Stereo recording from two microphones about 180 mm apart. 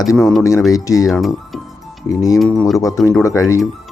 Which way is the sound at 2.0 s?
20° left (ahead or behind).